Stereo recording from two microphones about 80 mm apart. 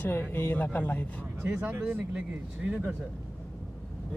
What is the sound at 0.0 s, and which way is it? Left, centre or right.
Speech, left.